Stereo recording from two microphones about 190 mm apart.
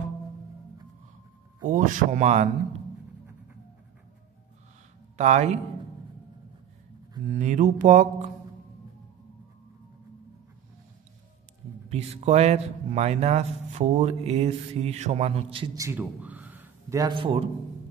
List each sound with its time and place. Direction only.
1.6 s speech: 45° right (ahead or behind)
5.1 s speech: 40° right (ahead or behind)
7.2 s speech: 40° right (ahead or behind)
11.9 s speech: 35° right (ahead or behind)
15.8 s a man's voice: 10° right (ahead or behind); by 17.5 s 25° right (ahead or behind)